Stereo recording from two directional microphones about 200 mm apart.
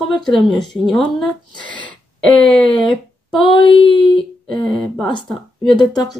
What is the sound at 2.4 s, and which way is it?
Speech, 5° left (ahead or behind).